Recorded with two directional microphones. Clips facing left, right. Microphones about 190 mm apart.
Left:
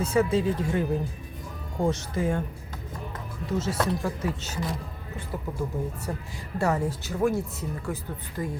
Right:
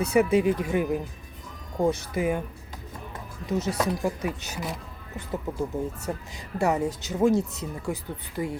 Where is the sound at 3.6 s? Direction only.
15° right (ahead or behind).